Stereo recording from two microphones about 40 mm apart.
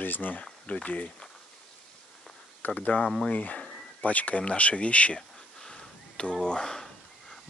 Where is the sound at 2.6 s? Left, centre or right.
Left.